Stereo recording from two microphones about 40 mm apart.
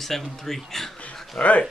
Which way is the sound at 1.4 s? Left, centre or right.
Left.